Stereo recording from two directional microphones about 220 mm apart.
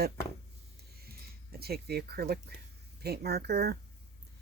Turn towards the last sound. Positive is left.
turn(degrees=-45)  # may be behind; listen again after turning